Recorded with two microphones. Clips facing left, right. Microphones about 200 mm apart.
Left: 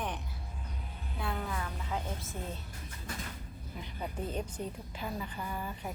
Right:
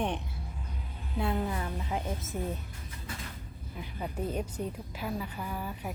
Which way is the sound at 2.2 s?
Centre (ahead or behind).